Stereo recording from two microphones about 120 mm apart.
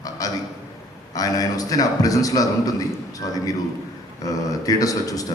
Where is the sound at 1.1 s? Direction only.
30° left (ahead or behind).